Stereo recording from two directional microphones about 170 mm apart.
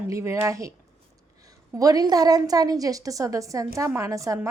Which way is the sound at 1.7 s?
20° right (ahead or behind).